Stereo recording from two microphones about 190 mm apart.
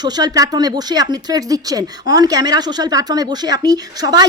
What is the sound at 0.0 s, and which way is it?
Speech, 20° right (ahead or behind).